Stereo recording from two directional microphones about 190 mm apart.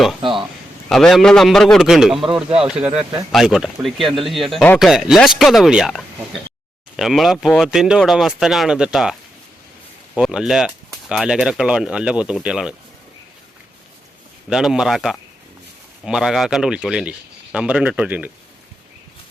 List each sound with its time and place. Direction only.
0.2 s a sound: 25° right (ahead or behind)
0.9 s speech: centre (ahead or behind)
3.0 s speech: 25° right (ahead or behind)
3.3 s speech: 5° right (ahead or behind)
10.2 s speech: 5° right (ahead or behind)
14.5 s speech: 5° right (ahead or behind)